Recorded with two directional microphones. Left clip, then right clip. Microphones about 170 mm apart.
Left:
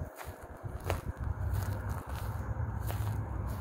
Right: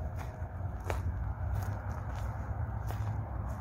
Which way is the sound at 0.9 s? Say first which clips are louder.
Left 2 dB; 50° left (ahead or behind).